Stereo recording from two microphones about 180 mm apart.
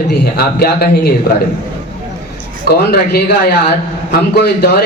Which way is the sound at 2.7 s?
65° left (ahead or behind).